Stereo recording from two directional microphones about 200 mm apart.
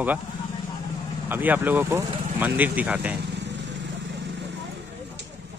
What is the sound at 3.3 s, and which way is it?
Vehicle, 60° right (ahead or behind).